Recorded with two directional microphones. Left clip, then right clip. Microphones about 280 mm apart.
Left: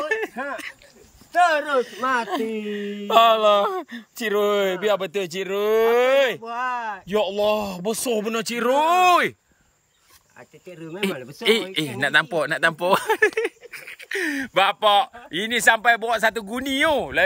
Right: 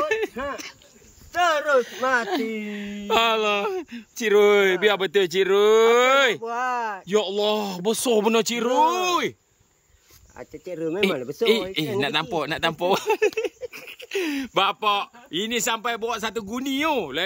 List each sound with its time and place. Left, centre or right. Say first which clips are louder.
0.1 s a sound: even; centre
1.3 s speech: left 1 dB; centre
6.4 s speech: right 1 dB; centre
7.1 s speech: left 2 dB; centre
10.7 s speech: right 9 dB; centre
11.4 s speech: left 1 dB; centre